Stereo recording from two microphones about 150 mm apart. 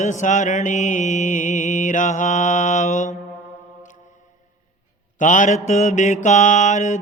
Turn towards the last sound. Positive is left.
turn(degrees=50)  # may be behind; listen again after turning